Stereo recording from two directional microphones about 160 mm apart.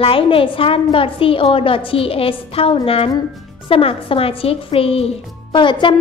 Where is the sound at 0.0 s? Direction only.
35° left (ahead or behind).